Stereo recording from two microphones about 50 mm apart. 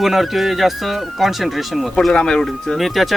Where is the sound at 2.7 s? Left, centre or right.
Centre.